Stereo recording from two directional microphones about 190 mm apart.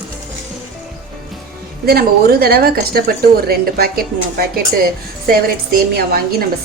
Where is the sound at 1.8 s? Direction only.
55° right (ahead or behind).